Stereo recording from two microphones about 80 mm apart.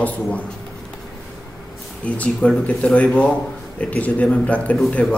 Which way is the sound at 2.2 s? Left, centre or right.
Centre.